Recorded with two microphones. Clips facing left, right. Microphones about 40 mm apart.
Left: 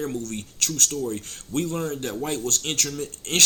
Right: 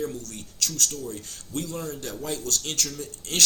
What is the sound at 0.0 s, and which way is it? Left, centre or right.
Speech, left.